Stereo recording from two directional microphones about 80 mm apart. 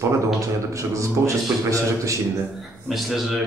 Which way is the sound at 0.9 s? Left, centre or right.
Right.